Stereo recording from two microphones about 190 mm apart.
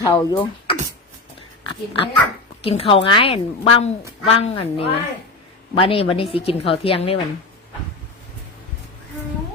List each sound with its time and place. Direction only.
0.0 s a woman's voice: 20° left (ahead or behind)